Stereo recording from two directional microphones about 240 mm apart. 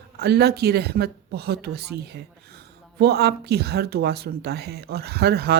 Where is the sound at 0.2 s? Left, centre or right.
Right.